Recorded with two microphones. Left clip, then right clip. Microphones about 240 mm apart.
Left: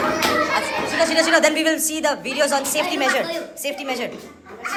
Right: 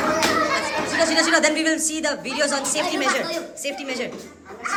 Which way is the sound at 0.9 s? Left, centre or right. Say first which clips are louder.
Left 1 dB; centre.